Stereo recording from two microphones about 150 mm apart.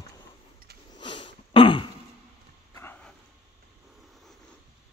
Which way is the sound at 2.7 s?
15° left (ahead or behind).